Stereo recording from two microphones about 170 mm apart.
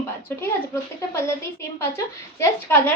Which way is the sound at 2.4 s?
10° left (ahead or behind).